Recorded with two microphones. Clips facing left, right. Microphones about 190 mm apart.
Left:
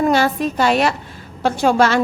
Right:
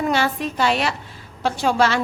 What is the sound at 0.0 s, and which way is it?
A woman's voice, 45° left (ahead or behind).